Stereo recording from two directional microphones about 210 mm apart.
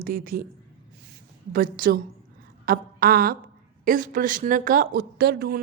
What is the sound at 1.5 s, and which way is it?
A woman's voice, 40° right (ahead or behind).